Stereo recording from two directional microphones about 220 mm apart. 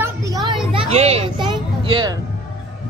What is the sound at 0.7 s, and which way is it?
Children playing, 30° right (ahead or behind).